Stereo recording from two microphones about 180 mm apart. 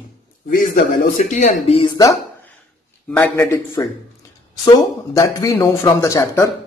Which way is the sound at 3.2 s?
20° left (ahead or behind).